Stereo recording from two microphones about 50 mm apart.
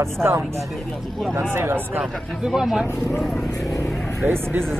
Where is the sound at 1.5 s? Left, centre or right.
Right.